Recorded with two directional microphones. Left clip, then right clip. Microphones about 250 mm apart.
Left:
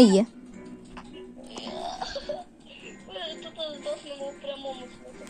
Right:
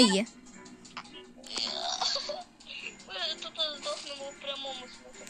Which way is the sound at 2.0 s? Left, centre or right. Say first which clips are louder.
Right 2 dB; right.